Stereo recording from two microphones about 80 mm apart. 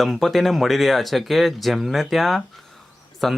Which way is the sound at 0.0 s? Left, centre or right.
Centre.